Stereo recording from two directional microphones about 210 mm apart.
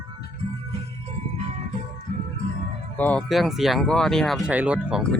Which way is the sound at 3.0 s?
5° left (ahead or behind).